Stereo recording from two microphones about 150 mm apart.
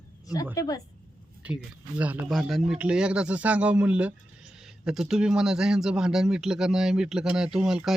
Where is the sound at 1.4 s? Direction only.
10° right (ahead or behind).